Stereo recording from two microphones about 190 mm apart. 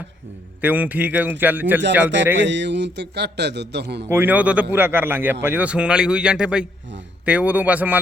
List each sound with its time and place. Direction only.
0.6 s a man's voice: 10° right (ahead or behind)
2.4 s a man's voice: 70° right (ahead or behind)
4.1 s a man's voice: 10° right (ahead or behind)